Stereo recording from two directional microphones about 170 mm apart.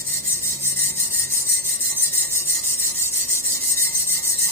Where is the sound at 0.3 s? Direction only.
15° left (ahead or behind).